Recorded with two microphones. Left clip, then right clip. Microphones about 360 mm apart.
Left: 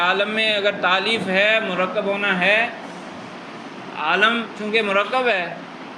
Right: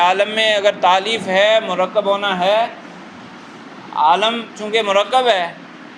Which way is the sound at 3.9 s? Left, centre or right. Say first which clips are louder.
Right 4 dB; centre.